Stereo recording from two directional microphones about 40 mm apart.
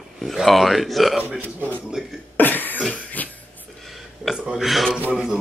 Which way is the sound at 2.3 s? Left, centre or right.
Left.